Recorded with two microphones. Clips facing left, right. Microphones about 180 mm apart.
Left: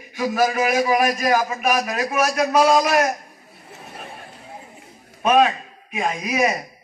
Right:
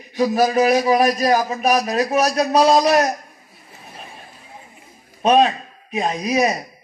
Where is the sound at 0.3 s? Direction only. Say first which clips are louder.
Right 3 dB; 25° right (ahead or behind).